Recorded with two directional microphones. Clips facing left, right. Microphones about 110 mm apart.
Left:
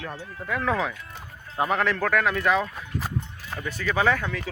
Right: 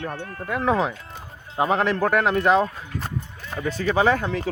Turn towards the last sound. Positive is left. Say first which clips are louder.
# right 4 dB
turn(degrees=-30)  # may be behind; listen again after turning